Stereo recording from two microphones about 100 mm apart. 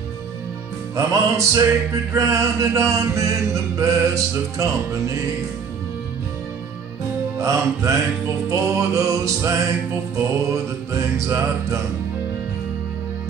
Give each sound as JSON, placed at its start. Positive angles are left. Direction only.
{"t": 0.9, "sound": "chant", "side_deg": -30}
{"t": 7.3, "sound": "chant", "side_deg": -30}